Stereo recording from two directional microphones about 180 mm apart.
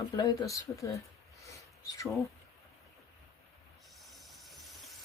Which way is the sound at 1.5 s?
20° left (ahead or behind).